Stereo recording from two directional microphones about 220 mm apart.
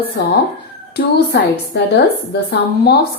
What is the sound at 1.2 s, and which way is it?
Speech, 50° left (ahead or behind).